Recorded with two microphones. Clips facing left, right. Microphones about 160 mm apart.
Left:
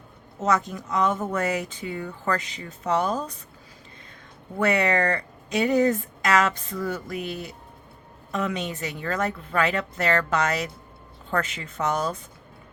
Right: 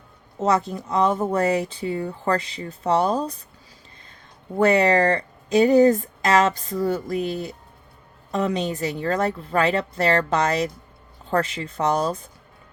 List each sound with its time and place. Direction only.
0.3 s speech: 30° right (ahead or behind)
4.5 s speech: 35° right (ahead or behind)